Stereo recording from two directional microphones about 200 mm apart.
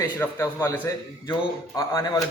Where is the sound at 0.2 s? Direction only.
15° left (ahead or behind).